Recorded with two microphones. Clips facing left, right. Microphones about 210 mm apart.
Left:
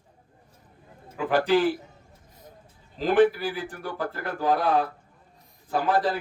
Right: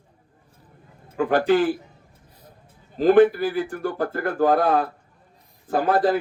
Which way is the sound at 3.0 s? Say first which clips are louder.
Right 5 dB; 50° right (ahead or behind).